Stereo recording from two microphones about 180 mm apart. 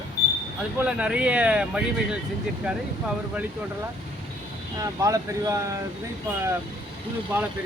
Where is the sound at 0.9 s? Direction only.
5° right (ahead or behind).